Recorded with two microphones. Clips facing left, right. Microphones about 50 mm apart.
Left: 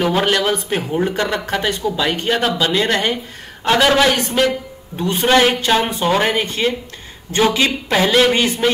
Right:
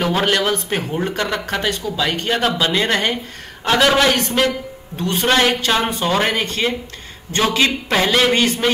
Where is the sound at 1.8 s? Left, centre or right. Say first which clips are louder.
Left 4 dB; left.